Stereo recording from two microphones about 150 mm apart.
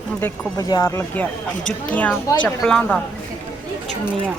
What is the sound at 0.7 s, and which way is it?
Speech, 20° left (ahead or behind).